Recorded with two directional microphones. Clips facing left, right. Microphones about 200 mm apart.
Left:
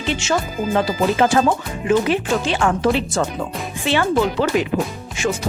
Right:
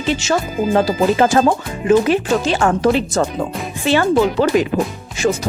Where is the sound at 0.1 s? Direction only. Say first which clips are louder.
Right 3 dB; 40° right (ahead or behind).